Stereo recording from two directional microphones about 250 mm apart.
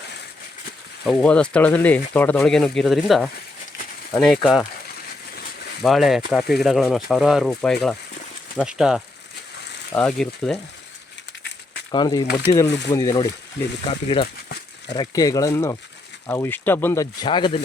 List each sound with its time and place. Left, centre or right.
1.0 s speech: centre
5.8 s speech: centre
11.9 s speech: centre